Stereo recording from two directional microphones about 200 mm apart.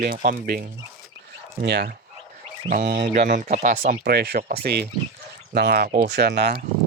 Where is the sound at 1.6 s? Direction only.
55° right (ahead or behind); by 3.7 s 35° right (ahead or behind).